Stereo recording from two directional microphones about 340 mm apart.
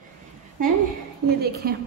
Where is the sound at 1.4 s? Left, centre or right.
Right.